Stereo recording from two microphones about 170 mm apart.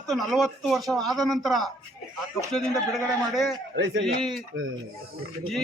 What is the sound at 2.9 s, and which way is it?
Speech, centre (ahead or behind).